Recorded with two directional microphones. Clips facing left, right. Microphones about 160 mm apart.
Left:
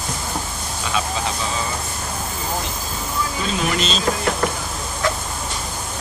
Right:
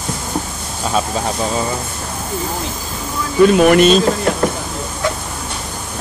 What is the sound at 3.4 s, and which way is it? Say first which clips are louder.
Speech: right 15 dB; 60° right (ahead or behind).